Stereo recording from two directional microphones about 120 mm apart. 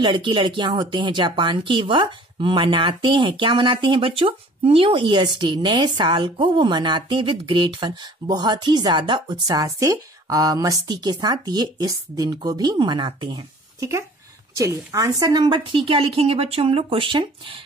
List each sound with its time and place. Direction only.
0.0 s speech: 40° right (ahead or behind)
13.7 s speech: 25° right (ahead or behind); by 17.6 s 45° right (ahead or behind)